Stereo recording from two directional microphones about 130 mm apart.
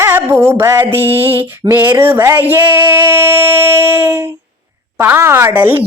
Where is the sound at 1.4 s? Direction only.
15° right (ahead or behind).